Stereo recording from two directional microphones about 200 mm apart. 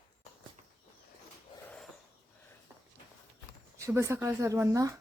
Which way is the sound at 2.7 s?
10° right (ahead or behind).